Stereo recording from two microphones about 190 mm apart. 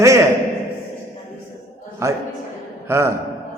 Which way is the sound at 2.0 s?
15° right (ahead or behind).